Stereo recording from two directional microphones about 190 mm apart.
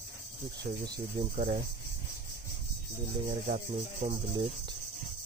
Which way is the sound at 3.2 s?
35° right (ahead or behind).